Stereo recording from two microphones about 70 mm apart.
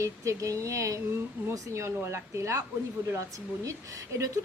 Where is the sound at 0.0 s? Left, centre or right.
Right.